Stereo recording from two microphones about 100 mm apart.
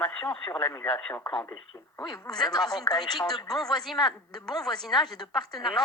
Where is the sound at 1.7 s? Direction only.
25° left (ahead or behind).